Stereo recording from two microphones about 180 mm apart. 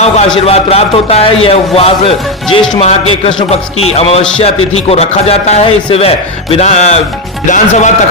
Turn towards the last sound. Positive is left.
turn(degrees=45)  # may be behind; listen again after turning